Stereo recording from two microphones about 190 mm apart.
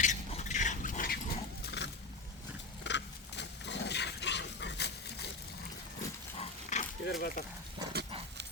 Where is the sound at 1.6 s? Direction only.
65° left (ahead or behind).